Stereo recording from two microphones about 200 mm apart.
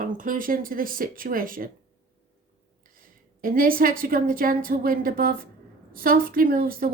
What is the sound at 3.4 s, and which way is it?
A woman's voice, 45° right (ahead or behind).